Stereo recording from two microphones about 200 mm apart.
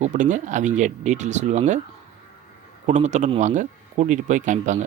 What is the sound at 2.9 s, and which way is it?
Speech, 35° right (ahead or behind).